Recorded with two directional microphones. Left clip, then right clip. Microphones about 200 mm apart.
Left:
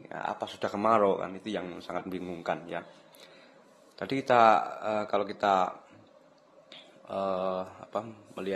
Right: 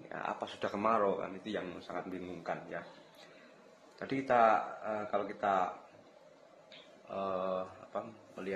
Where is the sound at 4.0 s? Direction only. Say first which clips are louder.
Left 6 dB; 35° left (ahead or behind).